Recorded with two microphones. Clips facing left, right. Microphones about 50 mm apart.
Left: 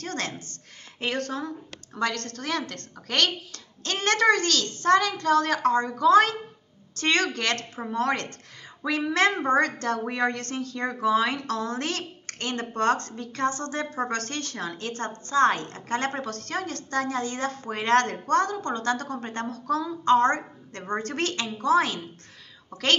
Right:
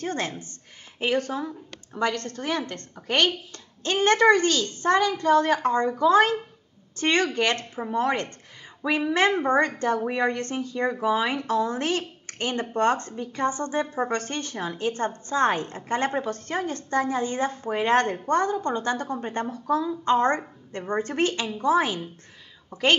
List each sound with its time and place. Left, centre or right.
0.0 s a woman's voice: centre